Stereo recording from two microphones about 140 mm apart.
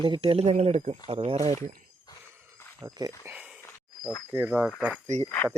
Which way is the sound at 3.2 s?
10° right (ahead or behind).